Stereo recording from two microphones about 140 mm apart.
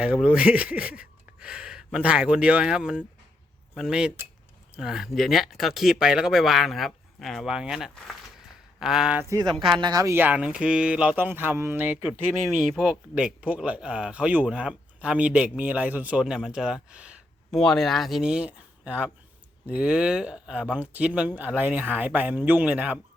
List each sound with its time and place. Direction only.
0.0 s speech: 10° right (ahead or behind)
9.7 s speech: 30° right (ahead or behind)
10.2 s speech: 10° right (ahead or behind)
17.6 s speech: 5° left (ahead or behind)